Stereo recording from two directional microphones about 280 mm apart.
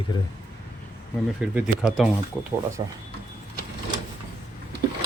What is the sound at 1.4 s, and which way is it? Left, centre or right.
Speech, centre.